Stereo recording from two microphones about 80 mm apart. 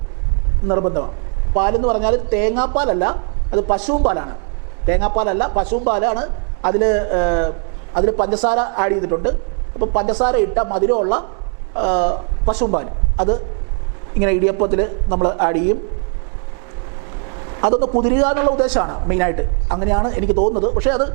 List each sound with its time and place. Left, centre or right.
0.7 s a man's voice: right
17.5 s a man's voice: right
18.0 s speech: centre